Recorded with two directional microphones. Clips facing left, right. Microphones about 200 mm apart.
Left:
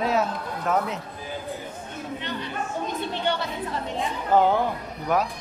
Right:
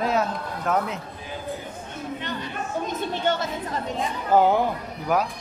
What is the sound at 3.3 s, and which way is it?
Chatter, 45° right (ahead or behind).